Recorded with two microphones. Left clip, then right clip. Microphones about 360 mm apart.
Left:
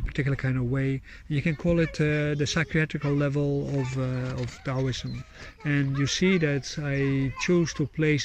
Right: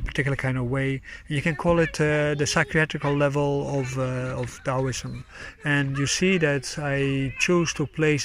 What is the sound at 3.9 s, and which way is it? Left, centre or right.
Speech, centre.